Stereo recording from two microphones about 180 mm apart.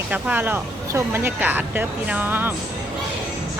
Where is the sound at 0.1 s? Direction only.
10° right (ahead or behind).